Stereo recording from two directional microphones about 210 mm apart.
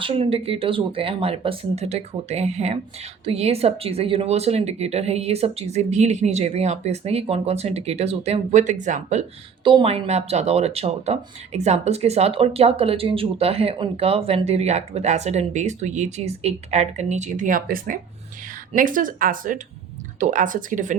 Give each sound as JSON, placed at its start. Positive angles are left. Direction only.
{"t": 0.0, "sound": "speech", "side_deg": -25}